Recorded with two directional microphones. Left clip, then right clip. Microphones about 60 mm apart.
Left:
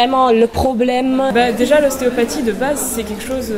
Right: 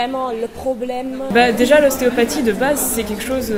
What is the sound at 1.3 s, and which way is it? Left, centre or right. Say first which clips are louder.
A woman's voice: right 3 dB; right.